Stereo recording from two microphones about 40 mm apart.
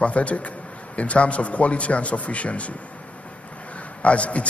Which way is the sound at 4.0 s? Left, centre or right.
Left.